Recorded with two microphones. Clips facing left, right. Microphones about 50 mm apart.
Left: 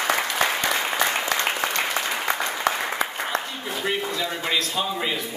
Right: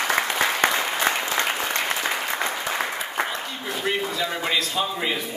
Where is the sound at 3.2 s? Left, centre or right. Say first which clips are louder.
Right 3 dB; right.